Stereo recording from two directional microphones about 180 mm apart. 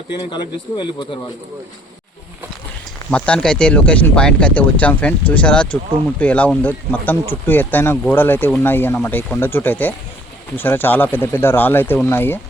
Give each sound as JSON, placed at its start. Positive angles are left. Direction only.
{"t": 0.2, "sound": "speech", "side_deg": 25}
{"t": 3.1, "sound": "speech", "side_deg": 5}